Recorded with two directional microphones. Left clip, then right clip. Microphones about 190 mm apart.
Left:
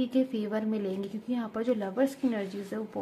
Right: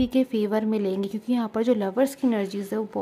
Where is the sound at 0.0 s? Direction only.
35° right (ahead or behind).